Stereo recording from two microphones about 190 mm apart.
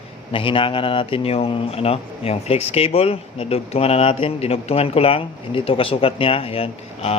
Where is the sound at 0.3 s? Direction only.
25° left (ahead or behind).